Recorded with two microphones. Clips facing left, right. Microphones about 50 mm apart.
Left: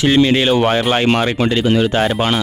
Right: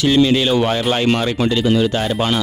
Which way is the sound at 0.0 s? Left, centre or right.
Left.